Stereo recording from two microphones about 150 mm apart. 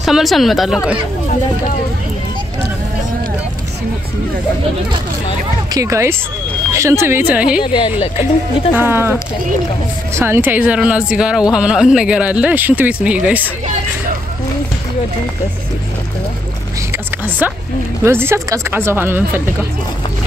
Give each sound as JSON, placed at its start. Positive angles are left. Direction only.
{"t": 0.0, "sound": "speech", "side_deg": 0}
{"t": 5.7, "sound": "speech", "side_deg": -20}
{"t": 7.7, "sound": "speech", "side_deg": 35}
{"t": 8.7, "sound": "speech", "side_deg": -15}
{"t": 17.4, "sound": "speech", "side_deg": -10}